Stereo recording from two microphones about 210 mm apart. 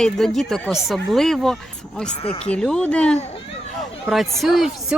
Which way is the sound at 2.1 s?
30° left (ahead or behind).